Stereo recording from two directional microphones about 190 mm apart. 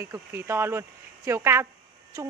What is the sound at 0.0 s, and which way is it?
Speech, 15° right (ahead or behind).